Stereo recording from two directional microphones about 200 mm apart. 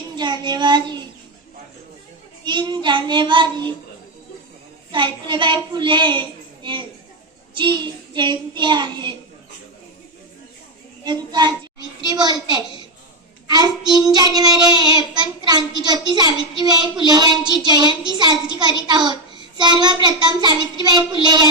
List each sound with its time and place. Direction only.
0.2 s child singing: 20° right (ahead or behind)
2.4 s child singing: 20° right (ahead or behind)
4.9 s child singing: 25° right (ahead or behind)
11.0 s child singing: 20° right (ahead or behind)